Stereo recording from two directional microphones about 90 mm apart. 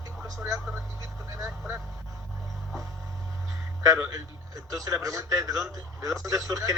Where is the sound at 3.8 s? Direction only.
35° right (ahead or behind).